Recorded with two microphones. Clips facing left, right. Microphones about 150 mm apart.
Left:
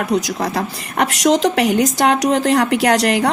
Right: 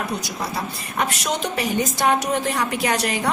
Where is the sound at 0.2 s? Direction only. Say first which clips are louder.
Left 7 dB; 90° left.